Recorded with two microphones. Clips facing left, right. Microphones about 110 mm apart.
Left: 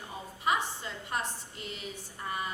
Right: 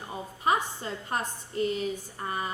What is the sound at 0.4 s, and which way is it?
A woman's voice, 40° right (ahead or behind).